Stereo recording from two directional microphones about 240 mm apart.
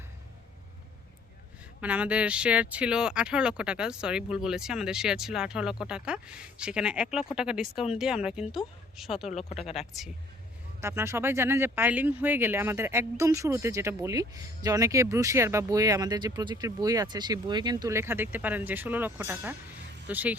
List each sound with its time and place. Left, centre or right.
1.8 s speech: centre
9.2 s speech: left
10.8 s speech: centre